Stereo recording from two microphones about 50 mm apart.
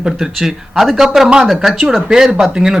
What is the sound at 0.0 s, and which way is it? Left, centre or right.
A man's voice, centre.